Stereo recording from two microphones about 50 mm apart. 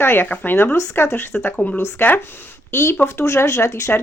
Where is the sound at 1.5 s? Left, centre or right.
Left.